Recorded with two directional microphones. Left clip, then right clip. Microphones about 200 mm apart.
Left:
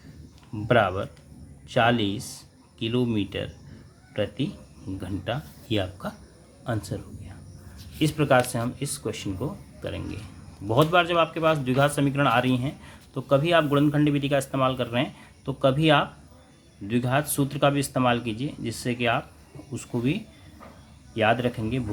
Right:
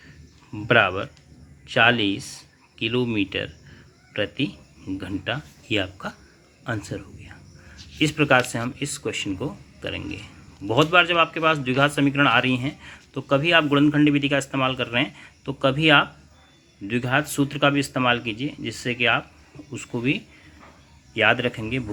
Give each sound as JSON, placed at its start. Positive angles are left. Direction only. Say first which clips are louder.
{"t": 0.5, "sound": "speech", "louder": "right 3 dB", "side_deg": -15}